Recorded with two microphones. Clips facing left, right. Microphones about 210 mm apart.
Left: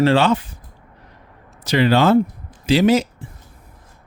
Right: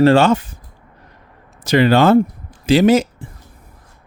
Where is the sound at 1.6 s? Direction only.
50° right (ahead or behind).